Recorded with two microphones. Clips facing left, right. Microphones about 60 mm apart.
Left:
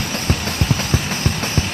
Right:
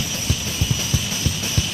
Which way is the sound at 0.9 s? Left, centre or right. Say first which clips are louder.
Left 5 dB; left.